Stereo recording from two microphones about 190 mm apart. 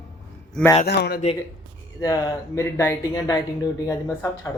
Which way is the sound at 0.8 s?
60° left (ahead or behind).